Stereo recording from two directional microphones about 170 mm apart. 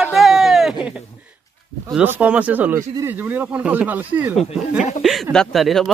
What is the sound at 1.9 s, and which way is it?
Speech, 10° right (ahead or behind).